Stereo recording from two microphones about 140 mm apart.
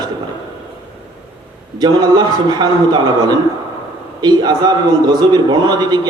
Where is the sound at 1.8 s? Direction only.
30° right (ahead or behind).